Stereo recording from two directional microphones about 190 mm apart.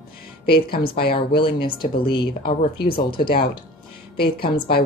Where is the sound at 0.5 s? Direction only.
55° left (ahead or behind).